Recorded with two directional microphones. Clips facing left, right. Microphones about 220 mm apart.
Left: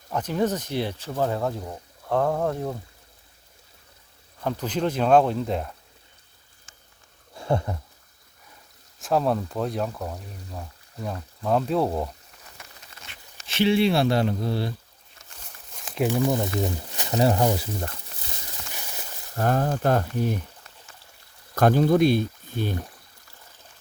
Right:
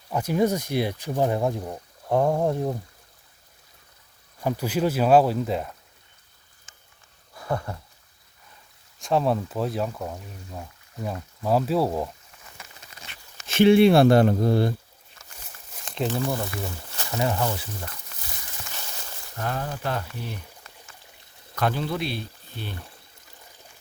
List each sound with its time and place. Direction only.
0.1 s speech: 10° right (ahead or behind)
4.4 s speech: 10° right (ahead or behind)
7.3 s a sound: 25° left (ahead or behind)
9.0 s speech: centre (ahead or behind)
13.5 s speech: 50° right (ahead or behind)
15.7 s speech: centre (ahead or behind); by 17.2 s 15° left (ahead or behind)
17.2 s speech: 35° left (ahead or behind)
18.7 s a sound: 15° left (ahead or behind)
19.4 s speech: 45° left (ahead or behind)
21.5 s speech: 45° left (ahead or behind)